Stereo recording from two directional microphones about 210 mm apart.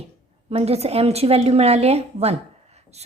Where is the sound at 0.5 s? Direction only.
30° right (ahead or behind).